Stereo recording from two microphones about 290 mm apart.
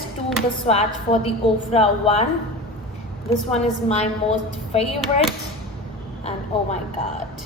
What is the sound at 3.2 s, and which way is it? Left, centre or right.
A woman's voice, left.